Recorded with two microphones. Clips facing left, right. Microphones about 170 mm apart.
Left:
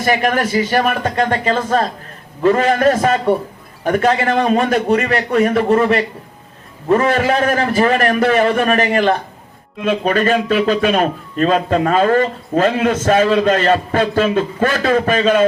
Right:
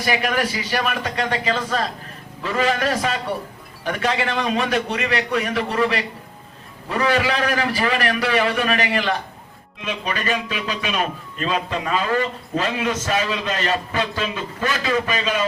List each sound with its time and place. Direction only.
0.0 s speech: 50° left (ahead or behind)